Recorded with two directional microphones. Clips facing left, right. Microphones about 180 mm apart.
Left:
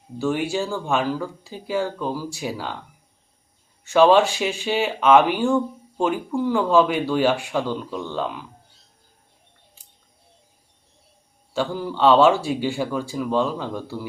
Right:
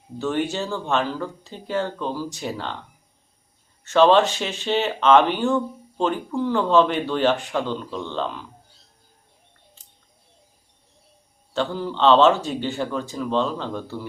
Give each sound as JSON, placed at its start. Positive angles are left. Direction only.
{"t": 0.2, "sound": "speech", "side_deg": 10}
{"t": 3.8, "sound": "speech", "side_deg": 10}
{"t": 9.8, "sound": "bird", "side_deg": 10}
{"t": 11.5, "sound": "speech", "side_deg": 10}